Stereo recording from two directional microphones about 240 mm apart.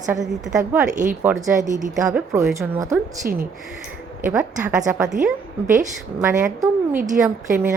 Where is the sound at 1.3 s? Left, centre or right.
Centre.